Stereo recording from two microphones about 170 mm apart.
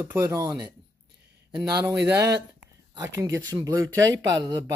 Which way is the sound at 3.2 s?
15° right (ahead or behind).